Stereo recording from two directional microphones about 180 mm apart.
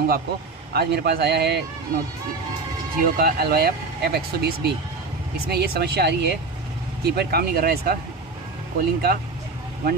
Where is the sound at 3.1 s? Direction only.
60° right (ahead or behind).